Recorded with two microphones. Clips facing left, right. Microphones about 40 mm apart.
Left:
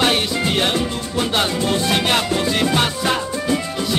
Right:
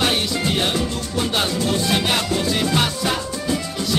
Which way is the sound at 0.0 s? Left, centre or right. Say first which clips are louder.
Left 2 dB; centre.